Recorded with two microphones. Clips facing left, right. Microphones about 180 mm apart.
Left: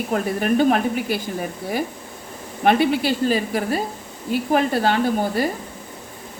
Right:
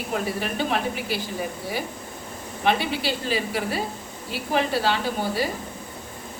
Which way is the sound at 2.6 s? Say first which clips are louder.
Left 6 dB; 50° left (ahead or behind).